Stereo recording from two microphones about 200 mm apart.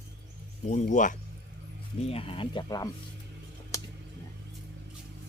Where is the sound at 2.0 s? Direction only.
30° left (ahead or behind).